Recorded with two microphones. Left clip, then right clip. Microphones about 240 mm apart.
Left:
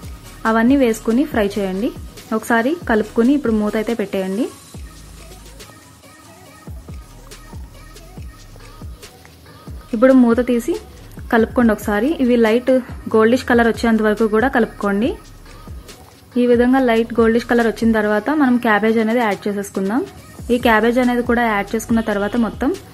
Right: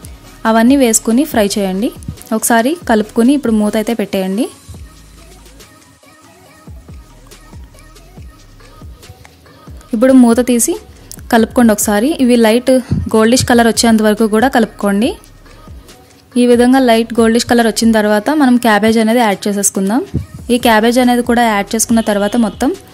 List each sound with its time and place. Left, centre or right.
0.4 s a woman's voice: right
9.8 s a woman's voice: right
16.3 s a woman's voice: right